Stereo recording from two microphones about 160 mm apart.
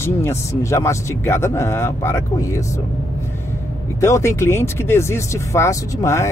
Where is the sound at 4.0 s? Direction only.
20° left (ahead or behind).